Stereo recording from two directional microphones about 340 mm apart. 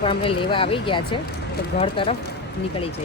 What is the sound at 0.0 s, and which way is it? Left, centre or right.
Speech, centre.